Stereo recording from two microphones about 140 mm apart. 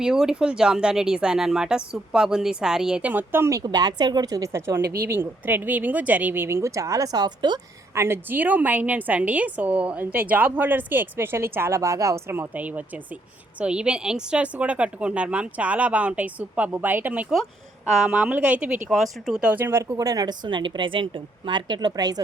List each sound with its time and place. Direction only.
0.0 s speech: 5° right (ahead or behind)
3.6 s a woman's voice: 30° right (ahead or behind)
7.9 s a woman's voice: 15° right (ahead or behind)